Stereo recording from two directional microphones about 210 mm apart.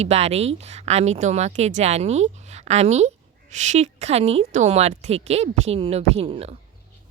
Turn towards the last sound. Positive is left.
turn(degrees=-30)  # may be behind; listen again after turning